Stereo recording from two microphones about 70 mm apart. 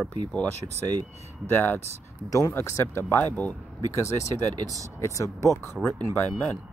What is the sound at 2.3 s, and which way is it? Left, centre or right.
Speech, left.